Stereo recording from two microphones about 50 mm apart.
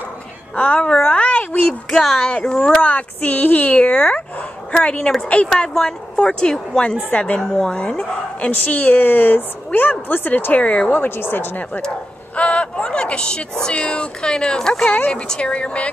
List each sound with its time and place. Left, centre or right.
0.6 s a woman's voice: left
1.0 s a sound: left
1.9 s speech: centre
2.8 s a woman's voice: left
5.5 s speech: centre
7.1 s a woman's voice: left
10.9 s speech: left
12.4 s speech: left
14.9 s speech: left
15.1 s a woman's voice: centre